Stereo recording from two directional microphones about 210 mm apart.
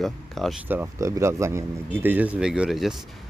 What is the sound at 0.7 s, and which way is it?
Speech, 10° right (ahead or behind).